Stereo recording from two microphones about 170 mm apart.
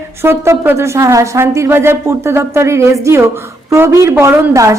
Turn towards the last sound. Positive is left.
turn(degrees=-15)  # may be behind; listen again after turning